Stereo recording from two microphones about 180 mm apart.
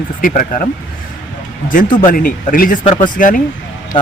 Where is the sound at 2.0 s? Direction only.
45° left (ahead or behind).